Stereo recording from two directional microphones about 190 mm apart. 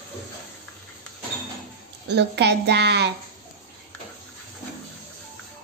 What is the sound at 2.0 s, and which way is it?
A woman's voice, 60° right (ahead or behind).